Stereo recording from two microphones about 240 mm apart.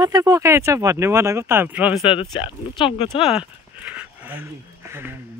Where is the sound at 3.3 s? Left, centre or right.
Centre.